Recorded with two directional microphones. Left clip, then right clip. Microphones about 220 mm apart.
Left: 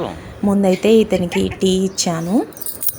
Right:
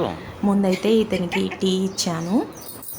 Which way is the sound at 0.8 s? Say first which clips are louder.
Left 6 dB; 15° left (ahead or behind).